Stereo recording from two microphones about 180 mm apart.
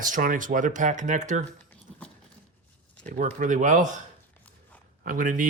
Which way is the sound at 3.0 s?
45° right (ahead or behind).